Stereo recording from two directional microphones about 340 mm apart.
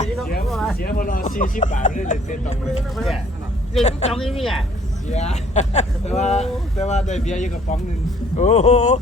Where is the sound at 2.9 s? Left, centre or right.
Centre.